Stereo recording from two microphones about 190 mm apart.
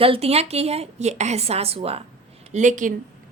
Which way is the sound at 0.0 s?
30° right (ahead or behind).